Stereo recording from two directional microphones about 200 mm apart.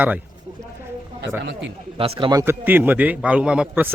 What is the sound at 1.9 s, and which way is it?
A man's voice, 30° right (ahead or behind).